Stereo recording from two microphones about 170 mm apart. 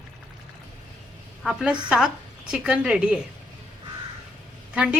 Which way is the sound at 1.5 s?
5° right (ahead or behind).